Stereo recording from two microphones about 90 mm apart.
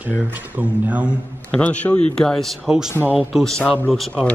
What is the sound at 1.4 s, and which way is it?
Speech, 15° left (ahead or behind).